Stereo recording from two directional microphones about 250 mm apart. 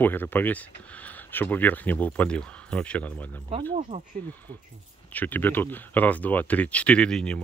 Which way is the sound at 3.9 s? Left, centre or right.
Right.